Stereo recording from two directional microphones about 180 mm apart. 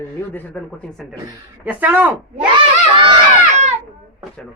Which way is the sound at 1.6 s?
10° right (ahead or behind).